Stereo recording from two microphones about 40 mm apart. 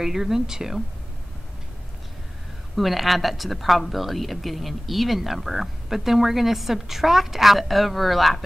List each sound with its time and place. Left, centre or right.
0.0 s speech: centre
2.7 s a woman's voice: centre